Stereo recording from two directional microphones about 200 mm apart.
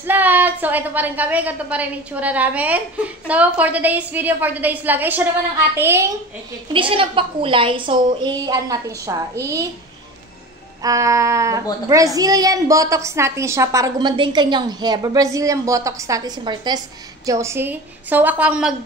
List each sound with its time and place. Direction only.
0.0 s a woman's voice: 10° right (ahead or behind)
6.7 s a woman's voice: 25° right (ahead or behind)
10.8 s a woman's voice: 15° right (ahead or behind)